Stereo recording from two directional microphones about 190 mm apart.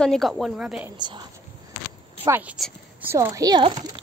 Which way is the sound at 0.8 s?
25° right (ahead or behind).